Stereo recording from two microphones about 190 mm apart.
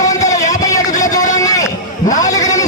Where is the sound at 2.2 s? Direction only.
20° left (ahead or behind).